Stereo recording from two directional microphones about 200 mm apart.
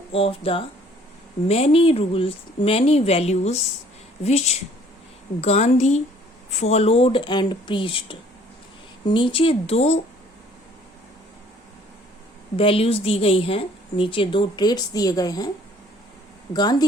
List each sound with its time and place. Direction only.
0.1 s a woman's voice: 30° left (ahead or behind)
12.5 s a woman's voice: 30° left (ahead or behind)
16.5 s a woman's voice: 20° left (ahead or behind)